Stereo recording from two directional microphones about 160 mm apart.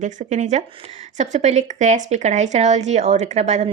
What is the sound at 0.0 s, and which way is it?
A woman's voice, 50° right (ahead or behind).